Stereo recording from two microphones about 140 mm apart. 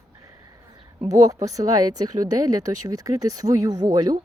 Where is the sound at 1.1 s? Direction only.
25° right (ahead or behind).